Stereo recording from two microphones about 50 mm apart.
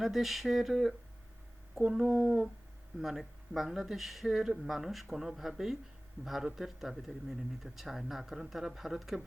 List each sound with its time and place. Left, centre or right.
0.0 s speech: centre
2.0 s speech: centre
3.0 s speech: centre